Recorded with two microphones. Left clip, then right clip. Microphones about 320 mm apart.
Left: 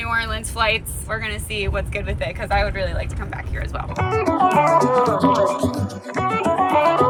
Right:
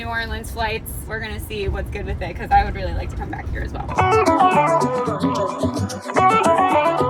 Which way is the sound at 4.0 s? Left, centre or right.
Right.